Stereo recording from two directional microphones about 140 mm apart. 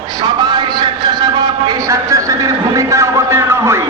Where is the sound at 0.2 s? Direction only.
30° right (ahead or behind).